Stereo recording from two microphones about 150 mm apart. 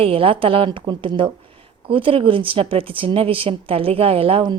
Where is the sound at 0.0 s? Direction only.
35° right (ahead or behind).